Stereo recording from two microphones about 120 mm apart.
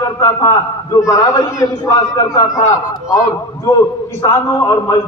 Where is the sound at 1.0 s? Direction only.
25° left (ahead or behind).